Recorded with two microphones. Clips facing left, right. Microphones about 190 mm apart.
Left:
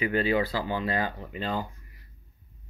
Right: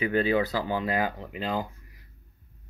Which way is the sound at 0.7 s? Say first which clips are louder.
Right 1 dB; 10° right (ahead or behind).